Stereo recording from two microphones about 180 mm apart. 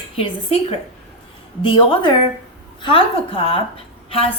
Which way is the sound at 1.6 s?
30° left (ahead or behind).